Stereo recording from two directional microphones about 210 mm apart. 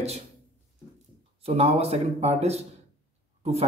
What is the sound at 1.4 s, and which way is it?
Speech, 30° right (ahead or behind).